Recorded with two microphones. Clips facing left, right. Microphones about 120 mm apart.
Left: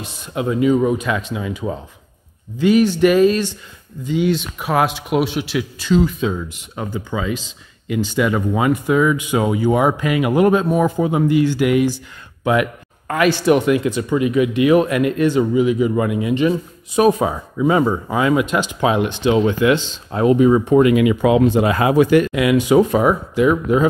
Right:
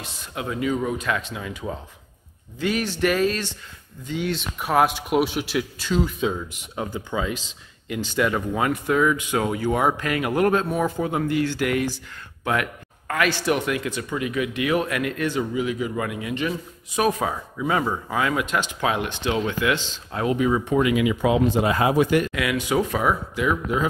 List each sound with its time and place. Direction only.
0.0 s speech: 20° left (ahead or behind)
2.6 s speech: 5° left (ahead or behind)
13.1 s speech: 20° left (ahead or behind); by 22.3 s 85° left
22.3 s speech: 20° left (ahead or behind)